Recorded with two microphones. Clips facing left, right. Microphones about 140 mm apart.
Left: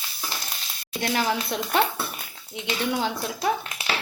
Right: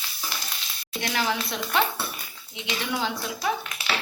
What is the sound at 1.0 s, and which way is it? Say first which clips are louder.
Speech: left 3 dB; 40° left (ahead or behind).